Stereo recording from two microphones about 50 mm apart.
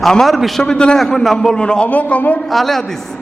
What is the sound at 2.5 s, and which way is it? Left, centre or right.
Speech, centre.